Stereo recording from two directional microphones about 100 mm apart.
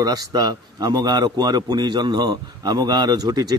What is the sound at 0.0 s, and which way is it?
A man's voice, 40° right (ahead or behind).